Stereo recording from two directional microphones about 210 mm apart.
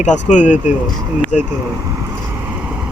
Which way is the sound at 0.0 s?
35° left (ahead or behind).